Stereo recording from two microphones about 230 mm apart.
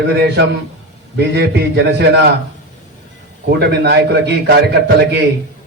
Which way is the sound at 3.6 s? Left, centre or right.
Right.